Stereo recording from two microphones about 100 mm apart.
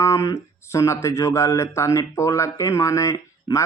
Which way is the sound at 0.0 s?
30° left (ahead or behind).